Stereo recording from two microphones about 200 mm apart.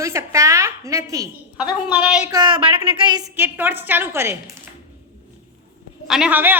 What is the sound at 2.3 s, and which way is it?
Speech, 20° right (ahead or behind).